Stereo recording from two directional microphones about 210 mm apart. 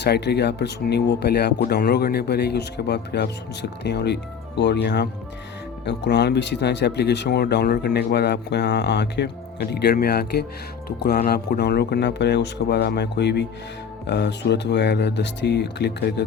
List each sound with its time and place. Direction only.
0.0 s speech: 50° left (ahead or behind)